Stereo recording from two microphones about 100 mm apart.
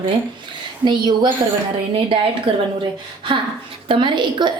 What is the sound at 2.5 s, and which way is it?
Speech, 60° right (ahead or behind).